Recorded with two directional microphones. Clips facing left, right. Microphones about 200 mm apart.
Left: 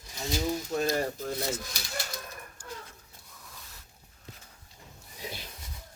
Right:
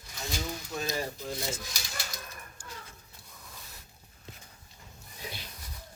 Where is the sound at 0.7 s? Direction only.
55° left (ahead or behind).